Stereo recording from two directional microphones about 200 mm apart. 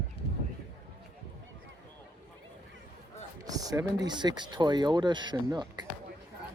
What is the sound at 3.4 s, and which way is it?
Speech, 20° right (ahead or behind).